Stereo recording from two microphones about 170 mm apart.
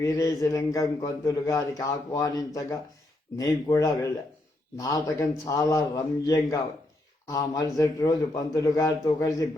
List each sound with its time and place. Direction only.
0.0 s a man's voice: 20° left (ahead or behind)